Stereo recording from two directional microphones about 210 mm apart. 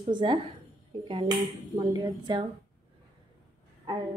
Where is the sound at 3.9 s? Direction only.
20° right (ahead or behind).